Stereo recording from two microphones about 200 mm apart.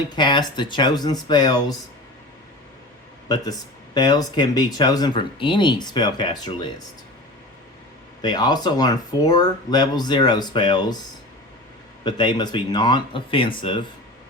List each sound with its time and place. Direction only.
0.1 s speech: 20° left (ahead or behind)
3.2 s speech: 20° left (ahead or behind)
8.2 s speech: 20° left (ahead or behind)
12.0 s speech: 20° left (ahead or behind)